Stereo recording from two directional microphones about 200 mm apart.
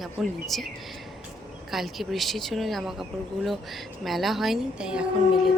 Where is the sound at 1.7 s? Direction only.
Centre (ahead or behind).